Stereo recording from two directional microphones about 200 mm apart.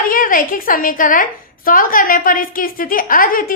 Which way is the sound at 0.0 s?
45° left (ahead or behind).